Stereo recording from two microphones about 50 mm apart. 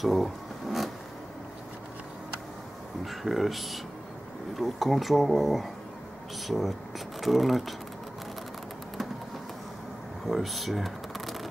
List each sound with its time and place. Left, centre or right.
0.0 s zipper: centre
3.0 s speech: centre
10.2 s speech: centre